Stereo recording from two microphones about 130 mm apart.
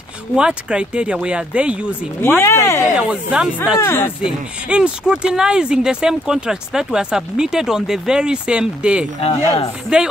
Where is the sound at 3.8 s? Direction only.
20° left (ahead or behind).